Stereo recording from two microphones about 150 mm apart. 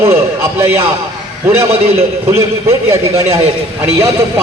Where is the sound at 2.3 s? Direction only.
20° right (ahead or behind).